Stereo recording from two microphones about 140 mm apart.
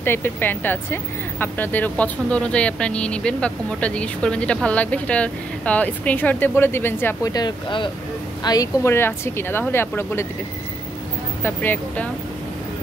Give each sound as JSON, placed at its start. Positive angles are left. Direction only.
{"t": 0.0, "sound": "speech", "side_deg": 15}
{"t": 7.3, "sound": "speech", "side_deg": 35}
{"t": 8.5, "sound": "speech", "side_deg": 20}
{"t": 11.4, "sound": "speech", "side_deg": 15}